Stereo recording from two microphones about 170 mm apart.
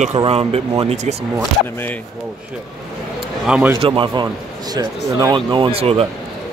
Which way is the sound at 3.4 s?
5° right (ahead or behind).